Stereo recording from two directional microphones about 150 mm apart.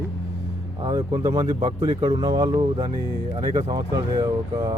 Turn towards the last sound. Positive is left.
turn(degrees=-25)  # may be behind; listen again after turning